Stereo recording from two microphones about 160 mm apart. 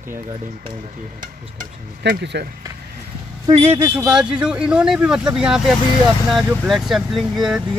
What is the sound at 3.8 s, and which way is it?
Speech, 10° right (ahead or behind).